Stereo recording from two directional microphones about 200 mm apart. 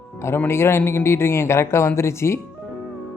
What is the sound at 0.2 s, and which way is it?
A man's voice, 10° left (ahead or behind).